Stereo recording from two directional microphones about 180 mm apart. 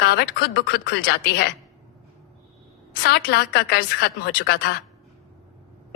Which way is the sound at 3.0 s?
65° left (ahead or behind).